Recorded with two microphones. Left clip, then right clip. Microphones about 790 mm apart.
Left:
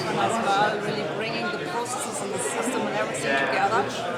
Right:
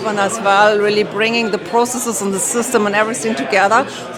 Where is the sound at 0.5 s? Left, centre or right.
Right.